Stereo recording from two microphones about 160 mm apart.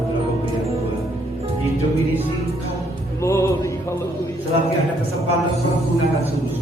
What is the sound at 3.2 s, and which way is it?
Music, 20° left (ahead or behind).